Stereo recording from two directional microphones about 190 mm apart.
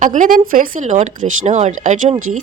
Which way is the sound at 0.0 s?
40° right (ahead or behind).